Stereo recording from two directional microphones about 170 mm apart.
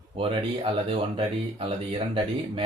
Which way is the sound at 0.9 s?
30° right (ahead or behind).